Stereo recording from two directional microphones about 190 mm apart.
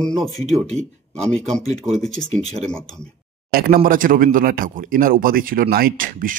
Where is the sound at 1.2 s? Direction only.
35° right (ahead or behind).